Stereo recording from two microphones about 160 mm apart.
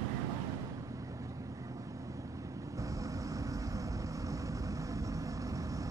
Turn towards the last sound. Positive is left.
turn(degrees=-20)  # may be behind; listen again after turning